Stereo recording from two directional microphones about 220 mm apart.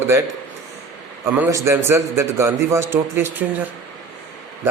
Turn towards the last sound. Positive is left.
turn(degrees=-10)  # may be behind; listen again after turning